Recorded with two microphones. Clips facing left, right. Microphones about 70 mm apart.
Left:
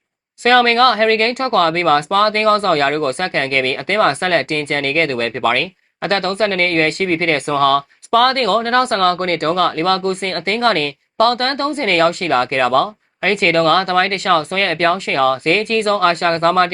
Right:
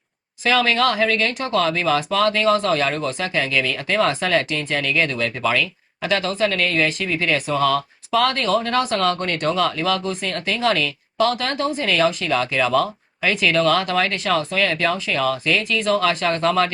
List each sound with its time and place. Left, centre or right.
0.4 s speech: left